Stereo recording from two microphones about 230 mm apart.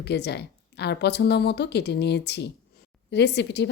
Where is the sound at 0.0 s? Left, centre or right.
Left.